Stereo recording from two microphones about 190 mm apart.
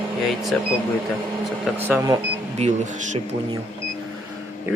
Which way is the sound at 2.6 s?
35° right (ahead or behind).